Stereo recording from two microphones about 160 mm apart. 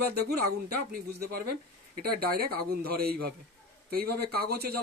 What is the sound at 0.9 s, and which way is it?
A man's voice, 75° right (ahead or behind).